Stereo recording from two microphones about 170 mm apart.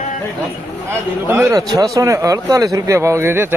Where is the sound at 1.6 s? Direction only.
25° right (ahead or behind).